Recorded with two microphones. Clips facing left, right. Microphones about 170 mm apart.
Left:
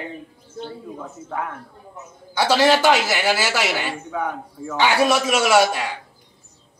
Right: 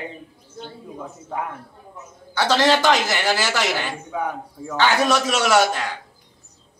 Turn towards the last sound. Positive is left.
turn(degrees=10)  # may be behind; listen again after turning